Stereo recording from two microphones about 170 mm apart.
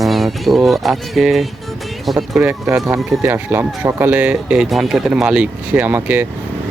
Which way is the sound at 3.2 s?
15° right (ahead or behind).